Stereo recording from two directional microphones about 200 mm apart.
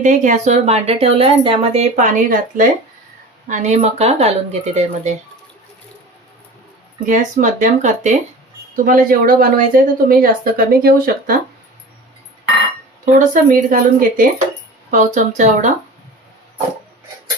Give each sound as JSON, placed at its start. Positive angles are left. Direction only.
{"t": 0.0, "sound": "speech", "side_deg": -40}
{"t": 7.0, "sound": "speech", "side_deg": -40}
{"t": 13.1, "sound": "speech", "side_deg": -40}